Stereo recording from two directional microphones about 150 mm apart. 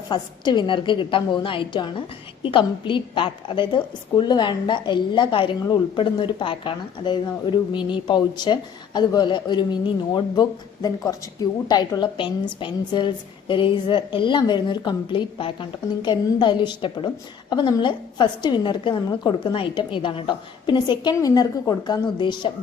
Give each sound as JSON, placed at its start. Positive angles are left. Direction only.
{"t": 0.1, "sound": "a woman's voice", "side_deg": 30}